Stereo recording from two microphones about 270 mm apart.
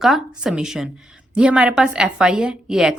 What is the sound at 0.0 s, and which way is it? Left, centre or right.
A woman's voice, centre.